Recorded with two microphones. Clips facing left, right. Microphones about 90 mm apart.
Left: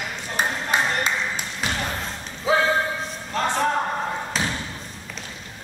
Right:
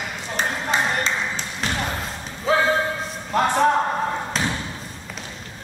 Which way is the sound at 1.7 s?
10° right (ahead or behind).